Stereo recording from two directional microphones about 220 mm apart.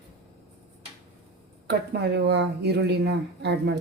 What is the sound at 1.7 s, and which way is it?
Speech, 50° right (ahead or behind).